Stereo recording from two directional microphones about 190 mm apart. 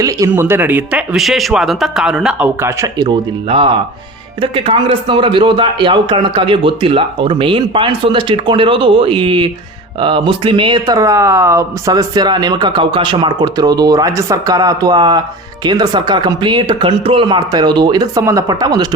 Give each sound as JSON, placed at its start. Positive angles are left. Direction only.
{"t": 0.0, "sound": "speech", "side_deg": -15}